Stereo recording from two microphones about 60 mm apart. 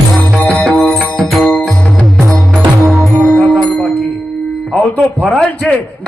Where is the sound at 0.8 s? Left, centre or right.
Centre.